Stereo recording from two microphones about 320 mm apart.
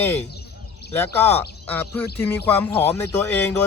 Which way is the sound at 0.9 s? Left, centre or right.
Centre.